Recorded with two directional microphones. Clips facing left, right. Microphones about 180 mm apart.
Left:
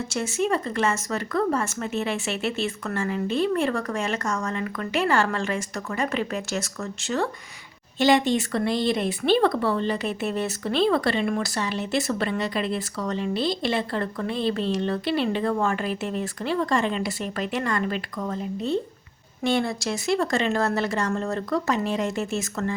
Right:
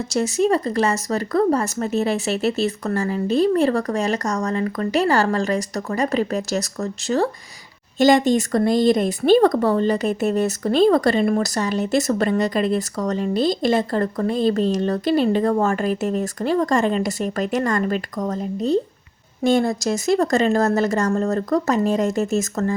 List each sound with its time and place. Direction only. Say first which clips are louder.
0.1 s speech: right 7 dB; 40° right (ahead or behind)